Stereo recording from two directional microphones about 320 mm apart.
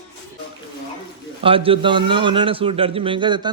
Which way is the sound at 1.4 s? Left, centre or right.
Centre.